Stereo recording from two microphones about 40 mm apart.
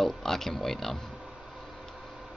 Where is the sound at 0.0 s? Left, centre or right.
Centre.